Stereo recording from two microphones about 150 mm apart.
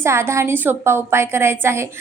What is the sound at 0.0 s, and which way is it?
A woman's voice, 20° right (ahead or behind).